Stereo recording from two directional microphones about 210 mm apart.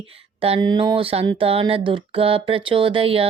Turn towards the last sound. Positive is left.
turn(degrees=-25)  # may be behind; listen again after turning